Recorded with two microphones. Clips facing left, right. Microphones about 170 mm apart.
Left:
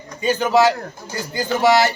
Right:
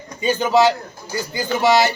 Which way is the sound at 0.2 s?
20° right (ahead or behind).